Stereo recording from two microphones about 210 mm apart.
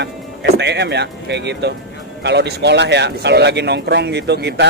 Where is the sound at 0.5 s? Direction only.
55° right (ahead or behind).